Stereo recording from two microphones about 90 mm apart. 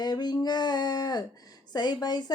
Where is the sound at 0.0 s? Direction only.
50° left (ahead or behind).